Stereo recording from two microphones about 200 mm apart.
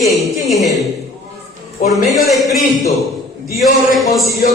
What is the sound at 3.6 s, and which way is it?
Speech, centre (ahead or behind).